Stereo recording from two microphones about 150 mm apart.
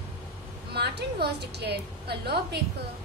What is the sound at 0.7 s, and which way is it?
A woman's voice, 90° right.